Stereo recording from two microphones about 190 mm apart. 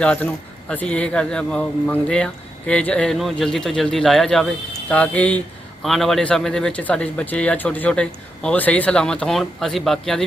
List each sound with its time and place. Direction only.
0.0 s a man's voice: 5° left (ahead or behind)